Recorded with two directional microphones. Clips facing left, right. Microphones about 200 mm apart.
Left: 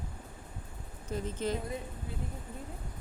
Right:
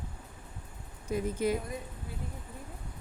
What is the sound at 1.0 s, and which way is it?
Speech, 10° right (ahead or behind).